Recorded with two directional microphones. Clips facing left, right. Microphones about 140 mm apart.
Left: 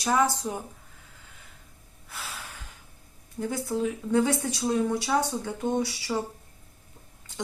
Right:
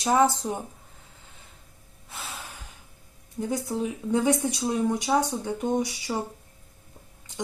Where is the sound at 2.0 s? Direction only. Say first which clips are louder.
Right 1 dB; 20° right (ahead or behind).